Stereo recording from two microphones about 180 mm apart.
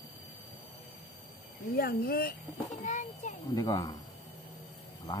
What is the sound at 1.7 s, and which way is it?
Speech, 60° left (ahead or behind).